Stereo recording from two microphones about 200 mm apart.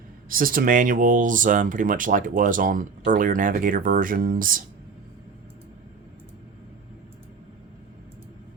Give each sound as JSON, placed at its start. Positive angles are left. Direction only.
{"t": 0.3, "sound": "speech", "side_deg": -45}